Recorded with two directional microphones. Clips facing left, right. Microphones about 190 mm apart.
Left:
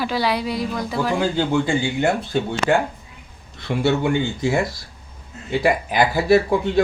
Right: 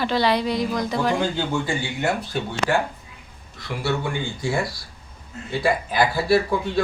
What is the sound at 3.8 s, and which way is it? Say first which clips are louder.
Speech: left 6 dB; 20° left (ahead or behind).